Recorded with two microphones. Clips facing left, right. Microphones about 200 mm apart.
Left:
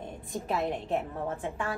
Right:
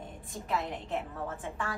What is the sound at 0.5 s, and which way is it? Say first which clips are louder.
Speech: left 2 dB; 50° left (ahead or behind).